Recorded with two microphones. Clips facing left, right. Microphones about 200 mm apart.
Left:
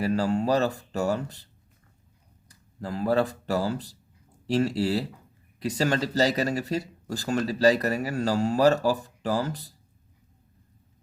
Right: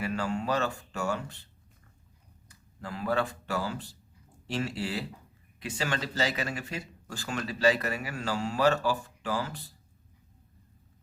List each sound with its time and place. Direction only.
0.0 s speech: 35° left (ahead or behind)
2.5 s speech: 40° left (ahead or behind)